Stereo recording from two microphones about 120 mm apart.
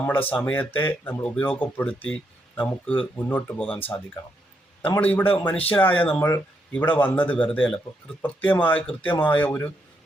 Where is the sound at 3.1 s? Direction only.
15° left (ahead or behind).